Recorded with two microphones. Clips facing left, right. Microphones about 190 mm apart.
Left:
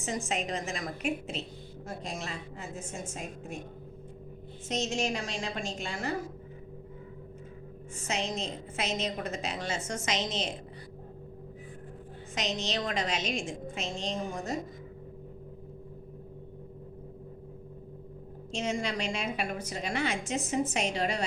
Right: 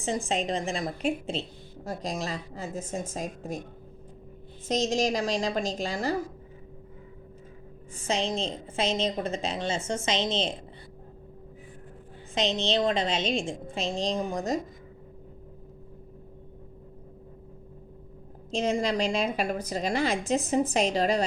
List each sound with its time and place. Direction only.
0.0 s a woman's voice: 30° right (ahead or behind)
4.7 s a woman's voice: 40° right (ahead or behind)
8.0 s a woman's voice: 30° right (ahead or behind)
12.3 s a woman's voice: 30° right (ahead or behind)
18.5 s a woman's voice: 35° right (ahead or behind)